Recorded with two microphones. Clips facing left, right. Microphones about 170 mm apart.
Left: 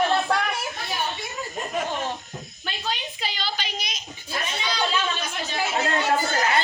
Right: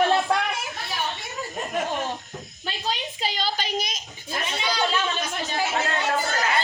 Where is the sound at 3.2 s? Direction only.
40° right (ahead or behind).